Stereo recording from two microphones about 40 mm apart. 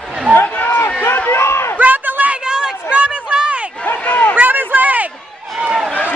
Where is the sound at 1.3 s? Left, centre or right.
Left.